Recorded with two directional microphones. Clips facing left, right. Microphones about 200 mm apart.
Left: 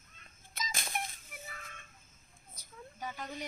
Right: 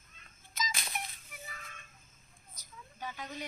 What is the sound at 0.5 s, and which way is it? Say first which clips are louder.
Music: even; 50° left (ahead or behind).